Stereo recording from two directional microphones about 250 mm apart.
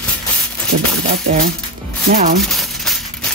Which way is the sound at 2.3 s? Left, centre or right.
Centre.